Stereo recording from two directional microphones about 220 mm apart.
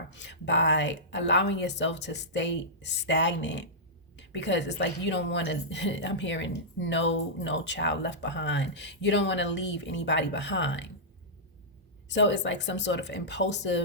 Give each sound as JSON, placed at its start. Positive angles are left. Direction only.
{"t": 0.1, "sound": "a woman's voice", "side_deg": 55}
{"t": 12.0, "sound": "a woman's voice", "side_deg": 55}